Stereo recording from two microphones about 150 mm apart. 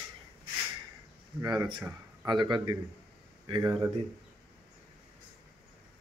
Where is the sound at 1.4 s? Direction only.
25° right (ahead or behind).